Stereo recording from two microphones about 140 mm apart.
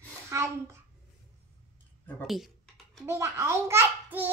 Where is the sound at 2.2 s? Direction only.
Centre (ahead or behind).